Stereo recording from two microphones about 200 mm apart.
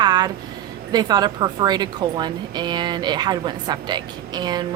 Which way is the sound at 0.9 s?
20° right (ahead or behind).